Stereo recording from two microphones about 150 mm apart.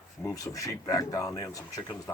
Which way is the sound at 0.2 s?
20° left (ahead or behind).